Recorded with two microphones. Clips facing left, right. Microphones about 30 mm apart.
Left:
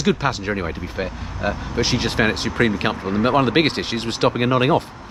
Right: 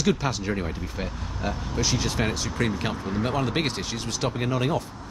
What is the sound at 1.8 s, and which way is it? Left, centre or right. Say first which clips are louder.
Speech: left 7 dB; left.